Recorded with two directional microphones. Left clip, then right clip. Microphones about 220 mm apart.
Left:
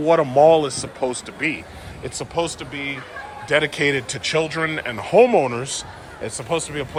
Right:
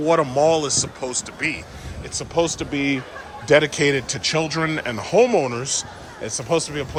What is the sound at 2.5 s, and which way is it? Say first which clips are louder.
Speech: right 5 dB; 35° right (ahead or behind).